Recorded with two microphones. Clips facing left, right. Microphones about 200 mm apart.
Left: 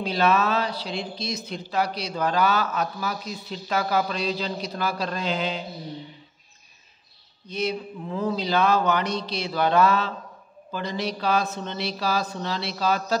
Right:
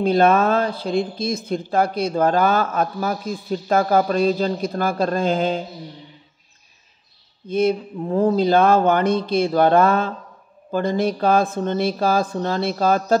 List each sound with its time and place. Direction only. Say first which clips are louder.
0.0 s speech: right 7 dB; 50° right (ahead or behind)
7.4 s speech: right 9 dB; 50° right (ahead or behind)